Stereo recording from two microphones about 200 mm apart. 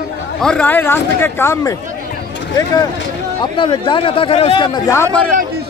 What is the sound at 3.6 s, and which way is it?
Speech, 25° left (ahead or behind).